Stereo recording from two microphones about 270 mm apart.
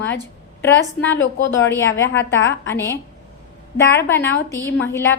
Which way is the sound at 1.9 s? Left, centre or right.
Left.